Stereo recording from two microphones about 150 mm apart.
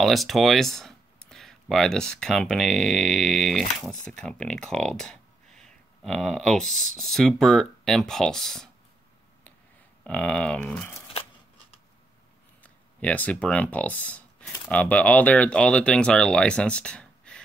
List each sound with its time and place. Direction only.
0.0 s speech: centre (ahead or behind)
10.0 s speech: 5° left (ahead or behind)
12.6 s speech: 10° left (ahead or behind)